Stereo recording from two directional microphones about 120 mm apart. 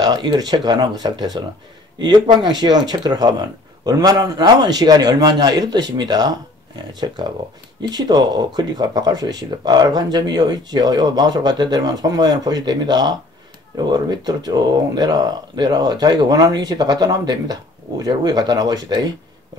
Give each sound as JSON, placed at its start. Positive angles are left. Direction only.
{"t": 0.0, "sound": "speech", "side_deg": -35}